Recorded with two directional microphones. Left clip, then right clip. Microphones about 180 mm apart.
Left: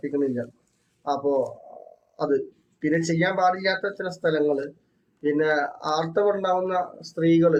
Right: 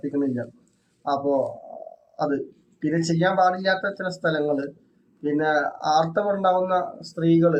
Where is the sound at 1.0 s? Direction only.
20° left (ahead or behind).